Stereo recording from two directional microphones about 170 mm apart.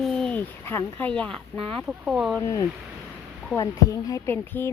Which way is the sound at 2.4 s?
20° left (ahead or behind).